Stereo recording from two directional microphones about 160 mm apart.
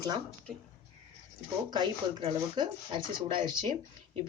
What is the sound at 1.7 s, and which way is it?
Speech, 25° right (ahead or behind).